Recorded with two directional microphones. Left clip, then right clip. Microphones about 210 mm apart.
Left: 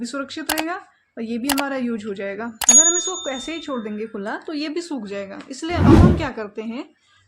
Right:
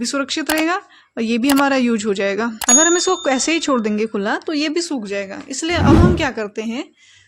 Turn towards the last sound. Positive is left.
turn(degrees=-30)  # may be behind; listen again after turning